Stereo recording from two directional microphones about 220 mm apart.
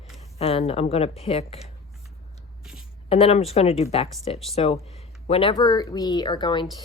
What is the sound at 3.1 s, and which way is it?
Speech, 25° left (ahead or behind).